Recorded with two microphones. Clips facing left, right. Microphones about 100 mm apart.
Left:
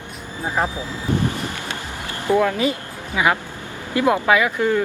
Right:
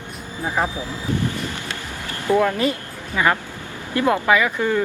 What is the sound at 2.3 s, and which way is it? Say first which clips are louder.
Speech: even; 20° left (ahead or behind).